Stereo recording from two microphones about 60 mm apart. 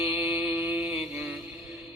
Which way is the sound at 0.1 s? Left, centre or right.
Right.